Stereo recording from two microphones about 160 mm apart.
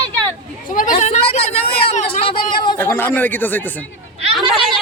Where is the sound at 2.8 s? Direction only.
15° left (ahead or behind).